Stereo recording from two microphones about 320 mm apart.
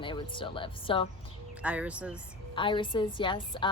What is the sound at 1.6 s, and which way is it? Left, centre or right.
Speech, centre.